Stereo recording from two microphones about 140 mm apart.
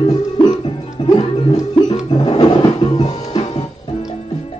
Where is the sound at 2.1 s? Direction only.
35° left (ahead or behind).